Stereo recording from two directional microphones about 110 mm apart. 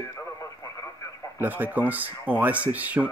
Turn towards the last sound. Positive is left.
turn(degrees=-15)  # may be behind; listen again after turning